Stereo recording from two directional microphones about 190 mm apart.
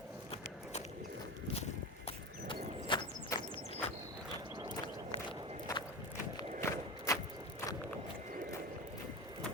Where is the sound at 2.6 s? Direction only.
35° right (ahead or behind).